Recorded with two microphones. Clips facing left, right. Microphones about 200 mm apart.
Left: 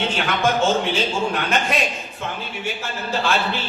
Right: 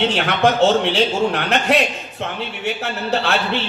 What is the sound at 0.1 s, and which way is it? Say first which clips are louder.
Speech: right 4 dB; 70° right (ahead or behind).